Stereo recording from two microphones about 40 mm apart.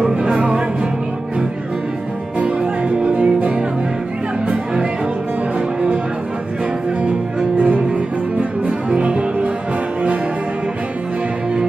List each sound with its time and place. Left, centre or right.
0.0 s music: right
2.3 s music: right
7.5 s music: right